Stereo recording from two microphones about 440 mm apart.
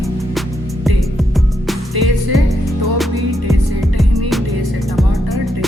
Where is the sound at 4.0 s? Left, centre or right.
Centre.